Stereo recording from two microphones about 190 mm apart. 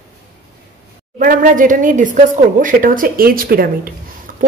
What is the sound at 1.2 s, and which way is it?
Speech, 45° right (ahead or behind).